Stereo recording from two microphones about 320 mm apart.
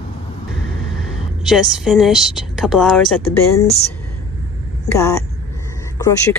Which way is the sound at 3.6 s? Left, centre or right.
Centre.